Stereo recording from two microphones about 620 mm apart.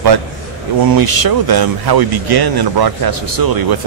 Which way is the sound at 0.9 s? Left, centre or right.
Right.